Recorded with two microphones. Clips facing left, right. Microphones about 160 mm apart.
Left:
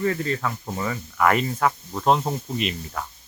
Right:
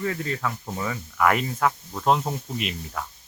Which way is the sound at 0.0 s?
Centre (ahead or behind).